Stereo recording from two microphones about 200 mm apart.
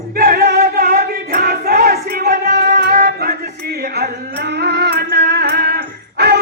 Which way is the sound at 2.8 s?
45° right (ahead or behind).